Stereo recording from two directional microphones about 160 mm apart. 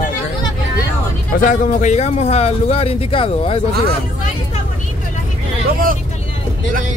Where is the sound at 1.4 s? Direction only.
50° left (ahead or behind); by 3.5 s 35° left (ahead or behind).